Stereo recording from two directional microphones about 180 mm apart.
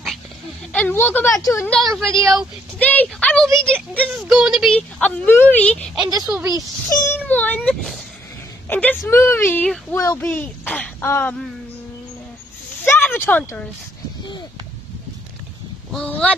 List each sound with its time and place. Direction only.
0.7 s speech: 10° left (ahead or behind)
1.7 s speech: centre (ahead or behind)
6.0 s a woman's voice: 20° right (ahead or behind)
7.1 s speech: 10° left (ahead or behind)
13.1 s speech: 10° left (ahead or behind)
15.9 s speech: 5° left (ahead or behind)